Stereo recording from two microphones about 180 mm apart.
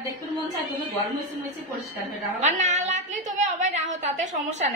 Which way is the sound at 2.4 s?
40° right (ahead or behind).